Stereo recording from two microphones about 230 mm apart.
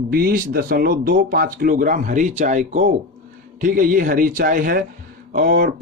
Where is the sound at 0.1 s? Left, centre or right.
Right.